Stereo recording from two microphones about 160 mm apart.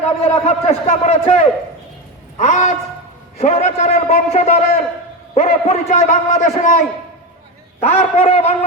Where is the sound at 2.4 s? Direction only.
45° left (ahead or behind).